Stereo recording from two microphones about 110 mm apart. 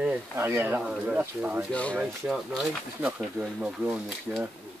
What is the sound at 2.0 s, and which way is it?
Speech, 5° right (ahead or behind).